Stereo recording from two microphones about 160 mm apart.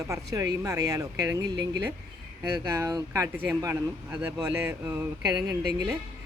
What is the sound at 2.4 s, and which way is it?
A man's voice, 20° right (ahead or behind).